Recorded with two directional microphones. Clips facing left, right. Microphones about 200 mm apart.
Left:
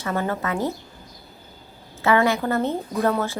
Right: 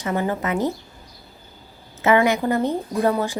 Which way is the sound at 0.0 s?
15° right (ahead or behind).